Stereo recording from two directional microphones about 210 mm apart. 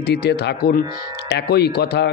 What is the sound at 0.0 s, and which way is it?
Speech, 50° left (ahead or behind).